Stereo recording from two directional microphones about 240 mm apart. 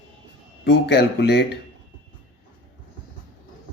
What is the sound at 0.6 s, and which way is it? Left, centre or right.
Speech, left.